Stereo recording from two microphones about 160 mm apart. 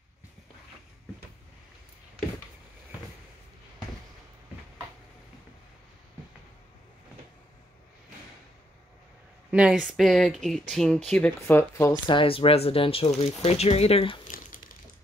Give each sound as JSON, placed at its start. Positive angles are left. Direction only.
{"t": 9.5, "sound": "speech", "side_deg": -5}
{"t": 11.9, "sound": "speech", "side_deg": 30}
{"t": 14.2, "sound": "crumpling", "side_deg": 60}